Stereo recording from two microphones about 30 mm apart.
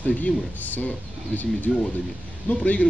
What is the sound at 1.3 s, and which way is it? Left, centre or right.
Speech, left.